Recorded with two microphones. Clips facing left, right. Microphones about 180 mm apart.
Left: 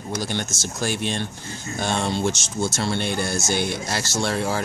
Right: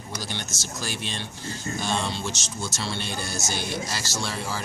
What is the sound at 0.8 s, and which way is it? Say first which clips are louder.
Speech: left 9 dB; 50° left (ahead or behind).